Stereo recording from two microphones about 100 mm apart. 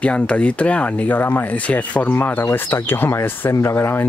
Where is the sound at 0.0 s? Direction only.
10° left (ahead or behind).